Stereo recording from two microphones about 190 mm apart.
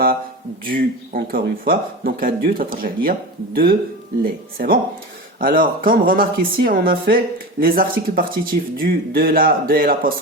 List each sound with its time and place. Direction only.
0.6 s a man's voice: 45° right (ahead or behind)